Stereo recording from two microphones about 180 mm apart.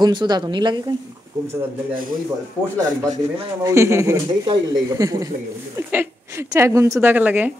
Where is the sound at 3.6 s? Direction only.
15° right (ahead or behind).